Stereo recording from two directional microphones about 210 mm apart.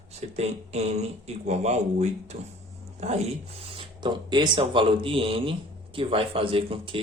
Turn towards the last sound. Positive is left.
turn(degrees=-25)  # may be behind; listen again after turning